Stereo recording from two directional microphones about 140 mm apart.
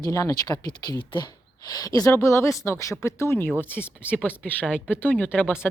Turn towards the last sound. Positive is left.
turn(degrees=10)  # may be behind; listen again after turning